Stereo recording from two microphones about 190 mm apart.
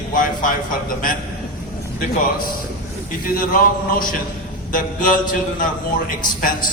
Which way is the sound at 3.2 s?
50° left (ahead or behind).